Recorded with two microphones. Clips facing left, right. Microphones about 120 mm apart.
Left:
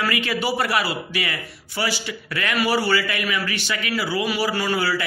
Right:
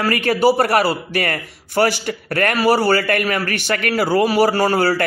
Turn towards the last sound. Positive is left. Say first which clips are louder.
# right 7 dB
turn(degrees=-45)  # may be behind; listen again after turning